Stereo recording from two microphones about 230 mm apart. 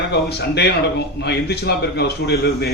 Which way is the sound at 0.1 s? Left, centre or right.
Left.